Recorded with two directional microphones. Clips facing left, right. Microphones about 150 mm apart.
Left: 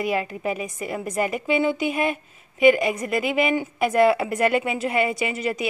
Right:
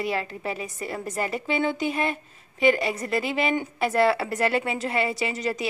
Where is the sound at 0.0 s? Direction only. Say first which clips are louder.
Left 4 dB; 15° left (ahead or behind).